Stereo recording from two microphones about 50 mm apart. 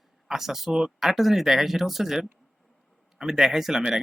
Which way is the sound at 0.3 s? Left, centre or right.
Centre.